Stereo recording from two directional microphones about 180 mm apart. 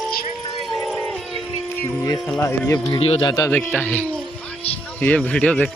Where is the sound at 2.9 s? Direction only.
35° left (ahead or behind).